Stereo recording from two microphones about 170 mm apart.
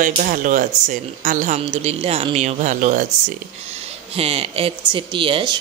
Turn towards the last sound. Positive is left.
turn(degrees=-30)  # may be behind; listen again after turning